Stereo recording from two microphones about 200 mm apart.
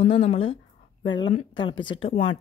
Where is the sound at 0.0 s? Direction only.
30° left (ahead or behind).